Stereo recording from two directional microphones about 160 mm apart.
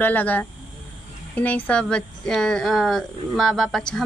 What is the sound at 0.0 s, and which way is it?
Speech, 10° left (ahead or behind).